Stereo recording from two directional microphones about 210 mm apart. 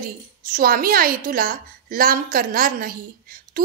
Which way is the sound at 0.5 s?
40° right (ahead or behind).